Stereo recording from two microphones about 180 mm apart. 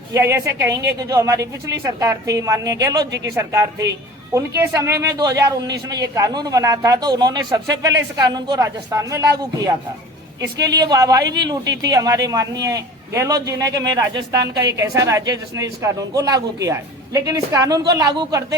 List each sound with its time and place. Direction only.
0.1 s a man's voice: 15° right (ahead or behind)
10.8 s a man's voice: 20° right (ahead or behind)